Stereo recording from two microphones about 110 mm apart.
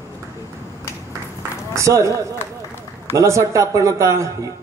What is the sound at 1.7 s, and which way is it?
Speech, 30° right (ahead or behind).